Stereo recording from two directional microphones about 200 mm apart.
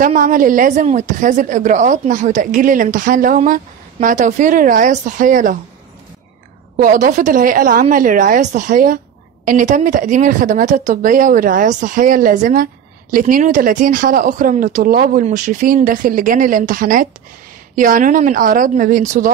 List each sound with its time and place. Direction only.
0.0 s a woman's voice: 40° right (ahead or behind)
6.8 s a woman's voice: 40° right (ahead or behind)